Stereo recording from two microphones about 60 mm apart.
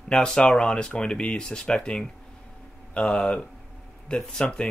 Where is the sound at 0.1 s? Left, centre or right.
Centre.